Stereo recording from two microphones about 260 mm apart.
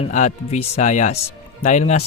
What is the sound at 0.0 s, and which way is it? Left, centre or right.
Speech, left.